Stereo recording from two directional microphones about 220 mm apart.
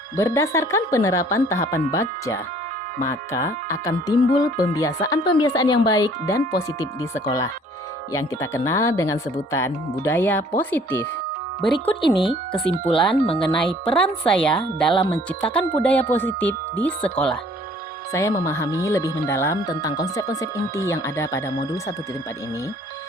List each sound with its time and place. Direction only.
0.2 s speech: 15° left (ahead or behind)
11.9 s speech: 20° left (ahead or behind)
13.6 s speech: 5° left (ahead or behind)